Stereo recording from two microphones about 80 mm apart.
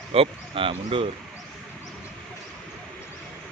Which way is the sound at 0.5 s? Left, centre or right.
Right.